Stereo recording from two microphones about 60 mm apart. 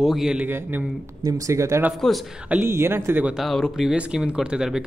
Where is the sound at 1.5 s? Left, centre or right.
Right.